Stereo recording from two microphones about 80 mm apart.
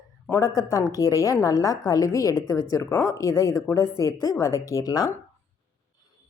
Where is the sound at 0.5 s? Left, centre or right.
Left.